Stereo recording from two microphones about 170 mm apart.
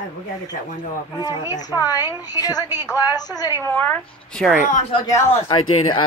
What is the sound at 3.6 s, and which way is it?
Speech, 10° left (ahead or behind).